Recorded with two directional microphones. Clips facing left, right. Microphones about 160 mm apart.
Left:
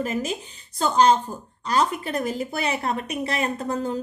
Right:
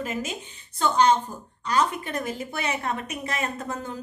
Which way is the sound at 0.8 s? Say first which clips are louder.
Left 2 dB; 35° left (ahead or behind).